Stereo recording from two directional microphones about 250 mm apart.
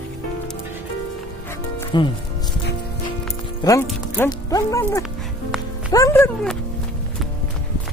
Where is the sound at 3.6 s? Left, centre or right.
Centre.